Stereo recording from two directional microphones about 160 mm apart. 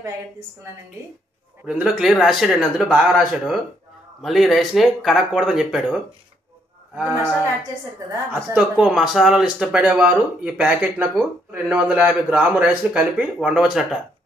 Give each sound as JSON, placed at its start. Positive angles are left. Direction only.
{"t": 1.7, "sound": "speech", "side_deg": -5}
{"t": 7.0, "sound": "a man's voice", "side_deg": -10}
{"t": 8.5, "sound": "a man's voice", "side_deg": -5}